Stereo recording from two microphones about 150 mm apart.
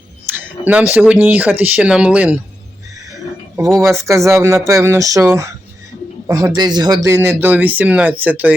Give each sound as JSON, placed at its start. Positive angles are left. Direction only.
{"t": 0.3, "sound": "a sound", "side_deg": -15}
{"t": 0.9, "sound": "speech", "side_deg": -10}
{"t": 3.5, "sound": "speech", "side_deg": -20}